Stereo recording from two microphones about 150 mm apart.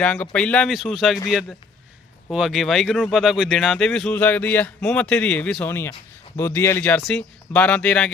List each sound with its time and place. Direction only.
0.0 s speech: 5° left (ahead or behind)
5.6 s speech: 15° left (ahead or behind)